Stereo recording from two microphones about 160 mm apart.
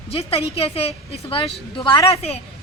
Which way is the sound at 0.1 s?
35° left (ahead or behind).